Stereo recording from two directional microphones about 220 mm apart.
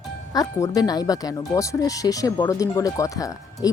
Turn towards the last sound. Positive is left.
turn(degrees=15)  # may be behind; listen again after turning